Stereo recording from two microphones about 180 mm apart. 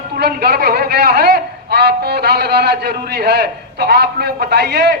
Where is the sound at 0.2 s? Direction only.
60° right (ahead or behind).